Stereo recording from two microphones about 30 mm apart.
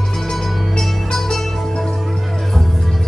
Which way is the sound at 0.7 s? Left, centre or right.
Centre.